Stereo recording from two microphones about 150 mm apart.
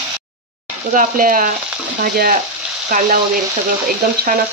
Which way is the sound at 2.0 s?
70° right (ahead or behind).